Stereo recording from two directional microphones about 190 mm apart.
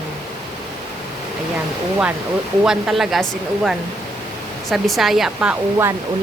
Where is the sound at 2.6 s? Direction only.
5° right (ahead or behind).